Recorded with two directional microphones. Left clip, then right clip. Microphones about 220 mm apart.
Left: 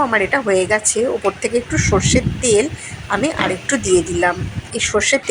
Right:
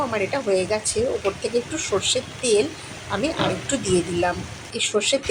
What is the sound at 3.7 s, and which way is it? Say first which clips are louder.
Speech: left 6 dB; 25° left (ahead or behind).